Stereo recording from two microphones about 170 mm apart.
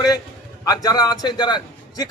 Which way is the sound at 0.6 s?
20° left (ahead or behind).